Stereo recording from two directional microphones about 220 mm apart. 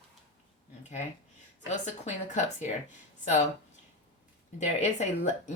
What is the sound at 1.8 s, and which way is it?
Speech, 30° left (ahead or behind).